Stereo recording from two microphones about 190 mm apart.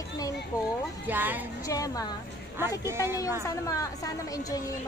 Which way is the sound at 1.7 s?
20° left (ahead or behind).